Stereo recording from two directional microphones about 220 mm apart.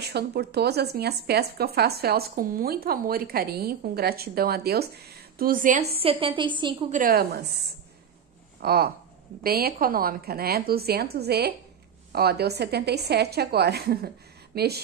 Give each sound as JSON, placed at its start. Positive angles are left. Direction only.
{"t": 0.0, "sound": "speech", "side_deg": -45}
{"t": 6.9, "sound": "a woman's voice", "side_deg": -40}
{"t": 8.5, "sound": "speech", "side_deg": -45}